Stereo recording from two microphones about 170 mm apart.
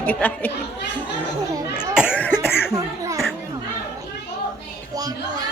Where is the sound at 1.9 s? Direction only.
5° right (ahead or behind).